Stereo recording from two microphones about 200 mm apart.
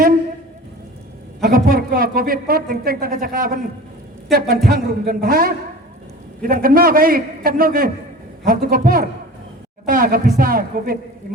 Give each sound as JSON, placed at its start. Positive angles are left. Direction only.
{"t": 1.4, "sound": "speech", "side_deg": -45}